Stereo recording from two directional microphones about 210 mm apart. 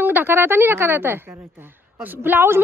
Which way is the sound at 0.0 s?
10° right (ahead or behind).